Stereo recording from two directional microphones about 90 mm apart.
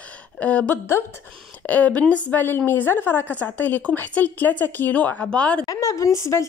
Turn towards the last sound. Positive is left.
turn(degrees=35)  # may be behind; listen again after turning